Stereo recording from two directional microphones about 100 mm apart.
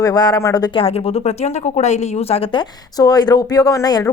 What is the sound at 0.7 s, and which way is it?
Speech, 80° left.